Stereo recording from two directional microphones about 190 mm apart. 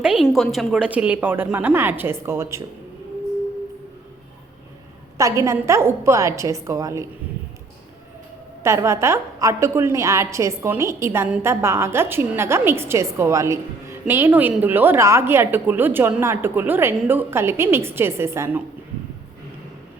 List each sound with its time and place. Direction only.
0.0 s a woman's voice: 5° right (ahead or behind)
5.1 s a woman's voice: 15° right (ahead or behind)
8.6 s a woman's voice: 15° right (ahead or behind)